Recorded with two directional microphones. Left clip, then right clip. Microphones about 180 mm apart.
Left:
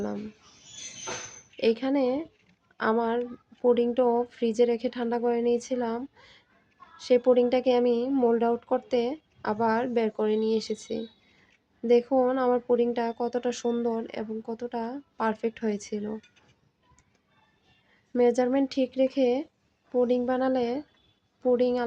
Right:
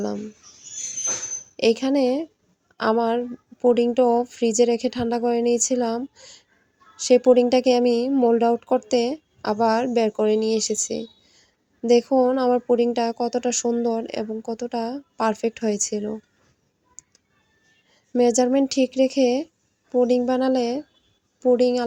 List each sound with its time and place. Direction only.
1.5 s a woman's voice: 30° right (ahead or behind)
18.1 s a woman's voice: 30° right (ahead or behind)